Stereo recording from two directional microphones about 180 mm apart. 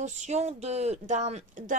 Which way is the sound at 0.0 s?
40° right (ahead or behind).